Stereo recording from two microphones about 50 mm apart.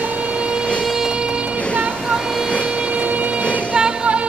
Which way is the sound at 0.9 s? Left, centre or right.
Centre.